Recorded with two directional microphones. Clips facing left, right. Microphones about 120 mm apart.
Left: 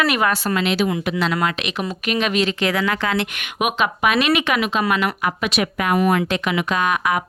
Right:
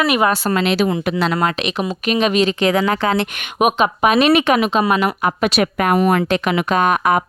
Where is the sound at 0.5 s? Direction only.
40° right (ahead or behind).